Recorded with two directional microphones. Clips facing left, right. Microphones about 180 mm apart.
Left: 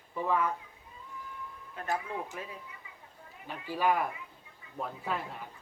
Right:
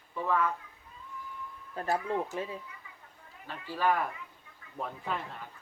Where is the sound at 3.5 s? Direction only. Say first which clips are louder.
Even; 15° left (ahead or behind).